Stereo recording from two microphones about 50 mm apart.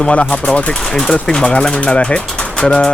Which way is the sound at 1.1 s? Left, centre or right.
Centre.